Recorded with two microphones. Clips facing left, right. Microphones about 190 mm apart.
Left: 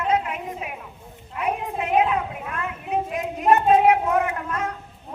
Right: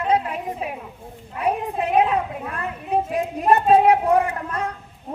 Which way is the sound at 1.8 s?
35° right (ahead or behind).